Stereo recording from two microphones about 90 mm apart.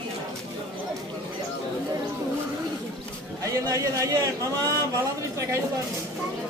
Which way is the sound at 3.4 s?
35° right (ahead or behind).